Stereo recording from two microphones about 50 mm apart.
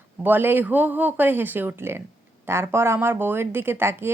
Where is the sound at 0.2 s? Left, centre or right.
Right.